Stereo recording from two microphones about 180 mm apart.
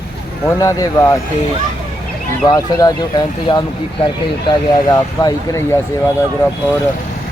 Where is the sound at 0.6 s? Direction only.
20° left (ahead or behind).